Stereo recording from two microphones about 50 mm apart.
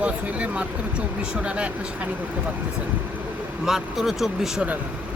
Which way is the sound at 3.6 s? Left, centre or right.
Centre.